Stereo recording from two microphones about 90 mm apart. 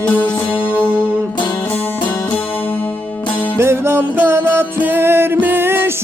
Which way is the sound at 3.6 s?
30° right (ahead or behind).